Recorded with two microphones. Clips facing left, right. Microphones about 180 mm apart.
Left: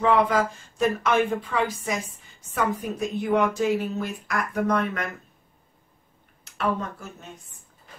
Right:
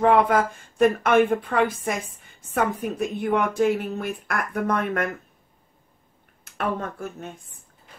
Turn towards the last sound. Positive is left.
turn(degrees=-55)  # may be behind; listen again after turning